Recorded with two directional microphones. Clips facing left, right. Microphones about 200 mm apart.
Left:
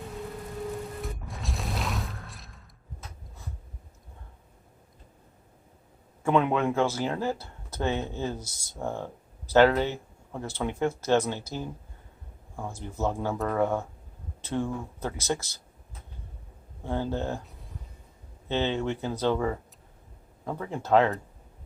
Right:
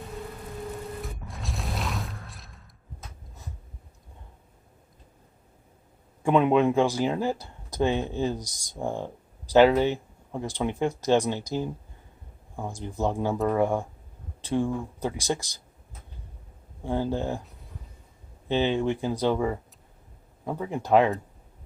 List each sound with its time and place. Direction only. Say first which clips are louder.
1.0 s mechanisms: left 1 dB; centre (ahead or behind)
6.2 s speech: right 4 dB; 15° right (ahead or behind)
16.8 s speech: right 2 dB; 15° right (ahead or behind)
18.4 s speech: right 3 dB; 15° right (ahead or behind)